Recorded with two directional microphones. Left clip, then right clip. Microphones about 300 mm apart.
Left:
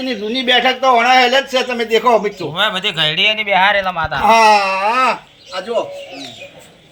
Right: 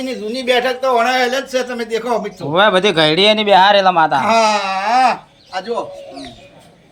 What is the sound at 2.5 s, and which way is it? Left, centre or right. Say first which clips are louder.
A man's voice: right 7 dB; right.